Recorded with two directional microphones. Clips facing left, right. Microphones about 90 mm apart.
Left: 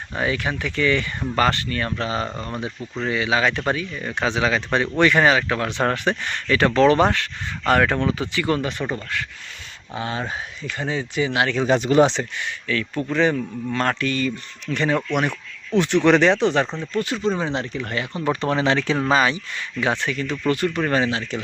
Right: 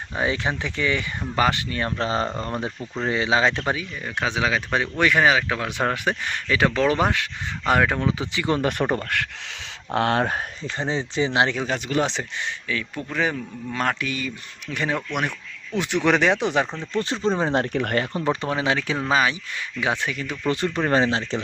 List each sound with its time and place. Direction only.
0.2 s speech: 25° right (ahead or behind)
1.8 s speech: 30° right (ahead or behind)
3.7 s speech: 5° right (ahead or behind)
8.6 s speech: 50° right (ahead or behind)
9.9 s speech: 65° right (ahead or behind)
10.6 s speech: 30° right (ahead or behind)
11.8 s speech: 30° left (ahead or behind)
12.6 s speech: 15° right (ahead or behind)
13.1 s speech: centre (ahead or behind)
16.8 s speech: 25° right (ahead or behind)
17.6 s speech: 55° right (ahead or behind)
18.4 s speech: 5° right (ahead or behind)
20.4 s speech: 25° right (ahead or behind)